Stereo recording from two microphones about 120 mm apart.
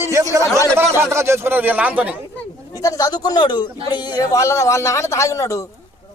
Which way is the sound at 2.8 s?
30° left (ahead or behind).